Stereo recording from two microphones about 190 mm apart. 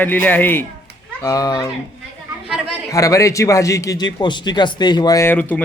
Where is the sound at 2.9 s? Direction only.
15° left (ahead or behind).